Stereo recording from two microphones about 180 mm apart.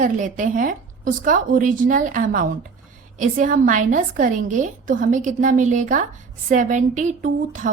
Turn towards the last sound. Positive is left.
turn(degrees=-45)  # may be behind; listen again after turning